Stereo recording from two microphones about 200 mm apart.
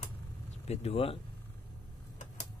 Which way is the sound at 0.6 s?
30° left (ahead or behind).